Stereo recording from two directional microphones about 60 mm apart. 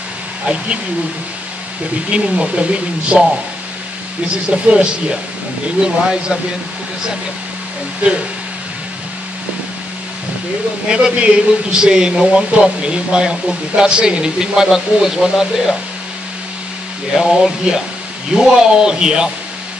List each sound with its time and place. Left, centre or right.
2.0 s speech: centre
4.5 s speech: centre
8.0 s speech: right
10.9 s speech: centre
17.1 s speech: centre